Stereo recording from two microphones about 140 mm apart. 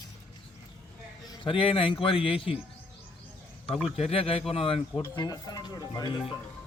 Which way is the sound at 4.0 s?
45° left (ahead or behind).